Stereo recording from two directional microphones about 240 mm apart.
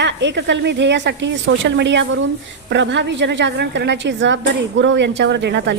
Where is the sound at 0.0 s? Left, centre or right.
Right.